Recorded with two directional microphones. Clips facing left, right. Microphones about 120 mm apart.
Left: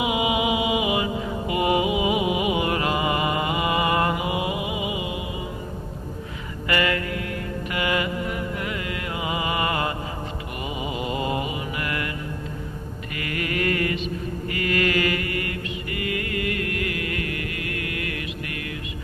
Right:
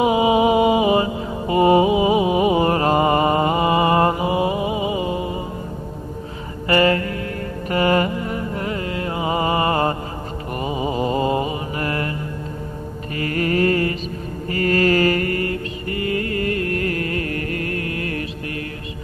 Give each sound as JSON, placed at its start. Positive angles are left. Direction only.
{"t": 0.0, "sound": "mantra", "side_deg": -35}
{"t": 6.7, "sound": "mantra", "side_deg": -35}
{"t": 7.7, "sound": "music", "side_deg": -40}
{"t": 10.6, "sound": "mantra", "side_deg": -35}
{"t": 13.1, "sound": "mantra", "side_deg": -35}